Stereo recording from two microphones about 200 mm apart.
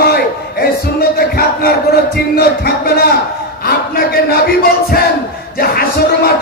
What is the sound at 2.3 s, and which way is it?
Speech, 50° left (ahead or behind).